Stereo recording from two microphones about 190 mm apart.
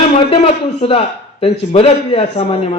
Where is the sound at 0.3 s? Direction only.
30° left (ahead or behind).